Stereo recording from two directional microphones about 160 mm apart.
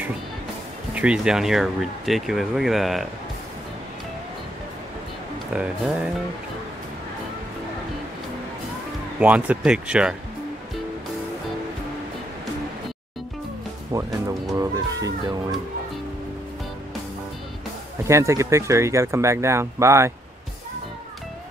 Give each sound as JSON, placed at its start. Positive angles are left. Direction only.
{"t": 0.9, "sound": "speech", "side_deg": -5}
{"t": 5.5, "sound": "speech", "side_deg": -5}
{"t": 9.2, "sound": "speech", "side_deg": -10}
{"t": 13.9, "sound": "music", "side_deg": -25}
{"t": 14.6, "sound": "speech", "side_deg": -25}
{"t": 18.0, "sound": "speech", "side_deg": -20}